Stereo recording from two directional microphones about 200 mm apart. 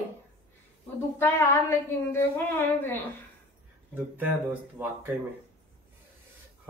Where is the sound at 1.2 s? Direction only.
10° left (ahead or behind).